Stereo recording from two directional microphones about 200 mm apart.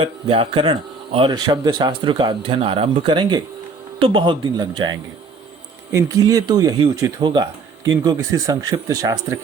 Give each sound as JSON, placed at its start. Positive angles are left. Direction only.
{"t": 0.0, "sound": "speech", "side_deg": -25}